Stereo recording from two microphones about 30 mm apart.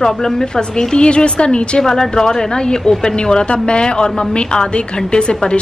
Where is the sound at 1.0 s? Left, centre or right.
Left.